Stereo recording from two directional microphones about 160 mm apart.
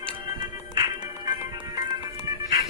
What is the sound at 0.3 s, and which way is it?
Music, 25° right (ahead or behind).